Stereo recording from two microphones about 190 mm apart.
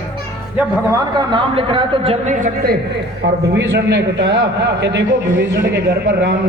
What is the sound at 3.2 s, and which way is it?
A man's voice, 75° right (ahead or behind).